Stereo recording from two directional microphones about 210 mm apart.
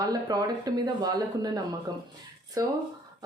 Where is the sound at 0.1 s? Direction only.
20° right (ahead or behind).